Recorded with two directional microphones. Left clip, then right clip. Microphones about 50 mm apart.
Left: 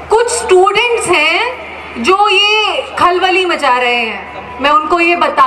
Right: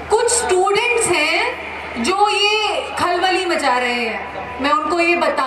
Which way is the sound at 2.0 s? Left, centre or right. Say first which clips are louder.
Left 7 dB; left.